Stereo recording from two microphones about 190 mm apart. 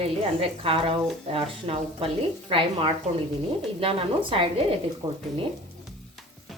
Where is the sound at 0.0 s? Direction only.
30° right (ahead or behind).